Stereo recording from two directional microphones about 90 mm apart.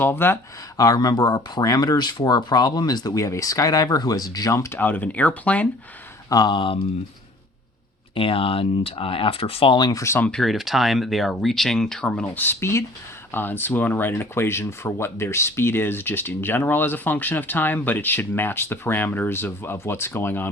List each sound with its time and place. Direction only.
0.0 s speech: 25° left (ahead or behind)
0.8 s speech: 45° left (ahead or behind)
4.8 s speech: 20° left (ahead or behind)
6.3 s speech: 55° left (ahead or behind)
8.1 s speech: 80° left
9.9 s speech: 35° left (ahead or behind)
10.2 s speech: 10° left (ahead or behind)
10.4 s speech: centre (ahead or behind); by 20.5 s 25° left (ahead or behind)